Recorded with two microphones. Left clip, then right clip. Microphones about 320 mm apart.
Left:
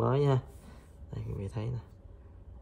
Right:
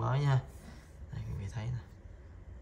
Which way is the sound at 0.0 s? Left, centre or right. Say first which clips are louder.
Left 7 dB; centre.